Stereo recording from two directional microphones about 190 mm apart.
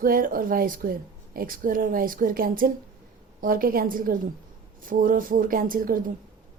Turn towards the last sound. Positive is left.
turn(degrees=-50)  # may be behind; listen again after turning